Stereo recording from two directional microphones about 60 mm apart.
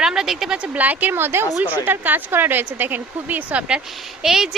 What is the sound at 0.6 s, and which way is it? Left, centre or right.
Speech, right.